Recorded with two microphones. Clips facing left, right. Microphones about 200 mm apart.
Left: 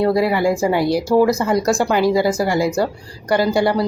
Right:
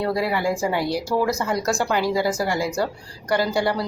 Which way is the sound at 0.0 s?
15° left (ahead or behind).